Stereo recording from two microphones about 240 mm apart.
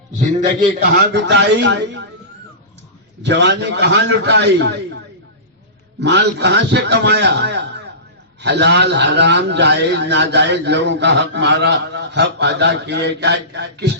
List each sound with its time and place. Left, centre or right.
0.9 s a man's voice: right
3.2 s a man's voice: right
6.0 s a man's voice: right